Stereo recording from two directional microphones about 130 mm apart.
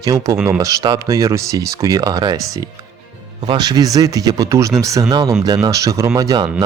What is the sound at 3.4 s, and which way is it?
Speech, 30° right (ahead or behind).